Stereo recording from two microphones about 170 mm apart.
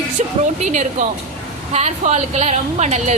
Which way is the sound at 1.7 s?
40° right (ahead or behind).